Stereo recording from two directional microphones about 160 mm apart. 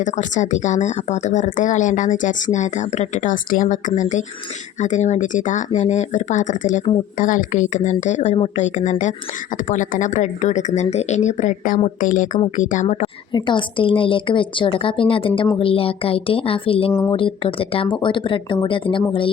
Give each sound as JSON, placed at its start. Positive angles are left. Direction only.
{"t": 0.0, "sound": "speech", "side_deg": 50}
{"t": 13.3, "sound": "speech", "side_deg": 30}